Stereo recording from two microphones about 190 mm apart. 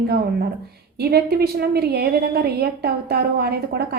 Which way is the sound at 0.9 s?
55° right (ahead or behind).